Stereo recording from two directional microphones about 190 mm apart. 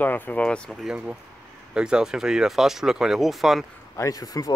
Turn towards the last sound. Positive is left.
turn(degrees=20)  # may be behind; listen again after turning